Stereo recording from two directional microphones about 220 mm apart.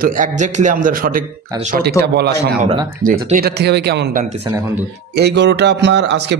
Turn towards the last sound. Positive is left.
turn(degrees=-50)  # may be behind; listen again after turning